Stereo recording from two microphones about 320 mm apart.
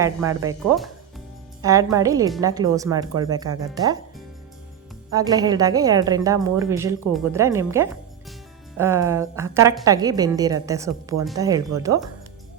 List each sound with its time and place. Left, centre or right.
0.0 s a woman's voice: centre
5.1 s a woman's voice: centre